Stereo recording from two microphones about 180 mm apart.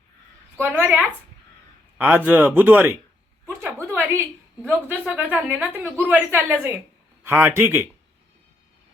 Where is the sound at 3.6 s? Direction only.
10° right (ahead or behind).